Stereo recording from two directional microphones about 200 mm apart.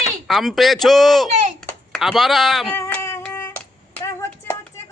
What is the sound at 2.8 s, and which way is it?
Hands, 15° left (ahead or behind).